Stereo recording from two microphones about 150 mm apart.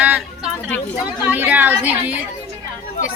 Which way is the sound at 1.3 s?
10° right (ahead or behind).